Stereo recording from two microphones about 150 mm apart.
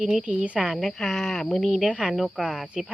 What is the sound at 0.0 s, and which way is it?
A woman's voice, 10° right (ahead or behind).